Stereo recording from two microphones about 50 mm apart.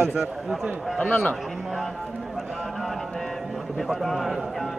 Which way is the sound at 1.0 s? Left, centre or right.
Centre.